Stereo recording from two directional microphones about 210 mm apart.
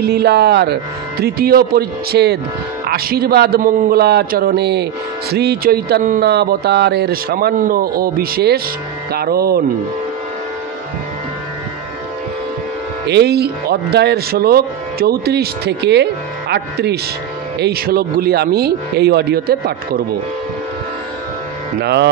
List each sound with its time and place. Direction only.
0.0 s speech: 50° right (ahead or behind)
13.0 s speech: 50° right (ahead or behind)
21.8 s speech: 50° right (ahead or behind)